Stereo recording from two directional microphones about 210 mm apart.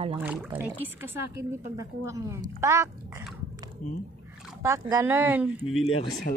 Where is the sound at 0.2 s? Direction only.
10° right (ahead or behind).